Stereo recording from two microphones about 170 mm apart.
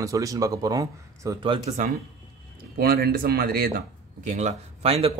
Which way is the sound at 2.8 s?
70° right (ahead or behind).